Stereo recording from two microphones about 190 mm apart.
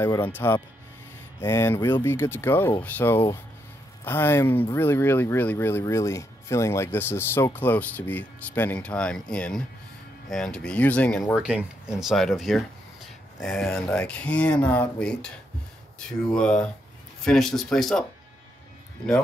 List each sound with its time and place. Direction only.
0.0 s speech: 10° left (ahead or behind)
16.3 s speech: 5° left (ahead or behind)